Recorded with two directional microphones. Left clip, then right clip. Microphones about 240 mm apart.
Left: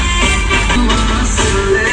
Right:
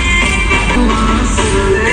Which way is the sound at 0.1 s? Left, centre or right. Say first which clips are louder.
Right 2 dB; right.